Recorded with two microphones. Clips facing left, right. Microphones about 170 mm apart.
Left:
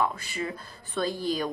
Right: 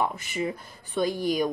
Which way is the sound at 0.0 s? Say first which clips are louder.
Right 1 dB; 20° right (ahead or behind).